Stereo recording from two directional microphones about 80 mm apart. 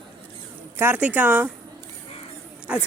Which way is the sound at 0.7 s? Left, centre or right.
Right.